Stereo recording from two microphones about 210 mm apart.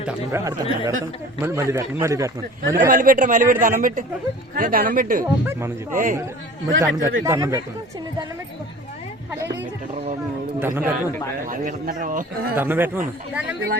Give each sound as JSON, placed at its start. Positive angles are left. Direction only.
{"t": 0.0, "sound": "a man's voice", "side_deg": -10}
{"t": 2.7, "sound": "a man's voice", "side_deg": -40}
{"t": 5.5, "sound": "a man's voice", "side_deg": -10}
{"t": 5.9, "sound": "a man's voice", "side_deg": -40}
{"t": 7.0, "sound": "a man's voice", "side_deg": -15}
{"t": 10.6, "sound": "a man's voice", "side_deg": -10}
{"t": 11.4, "sound": "a man's voice", "side_deg": -40}
{"t": 12.5, "sound": "a man's voice", "side_deg": -10}